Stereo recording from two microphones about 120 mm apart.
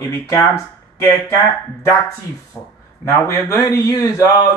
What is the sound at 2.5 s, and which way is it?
Speech, 15° left (ahead or behind).